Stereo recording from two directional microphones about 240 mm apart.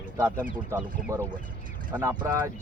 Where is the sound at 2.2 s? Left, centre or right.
Centre.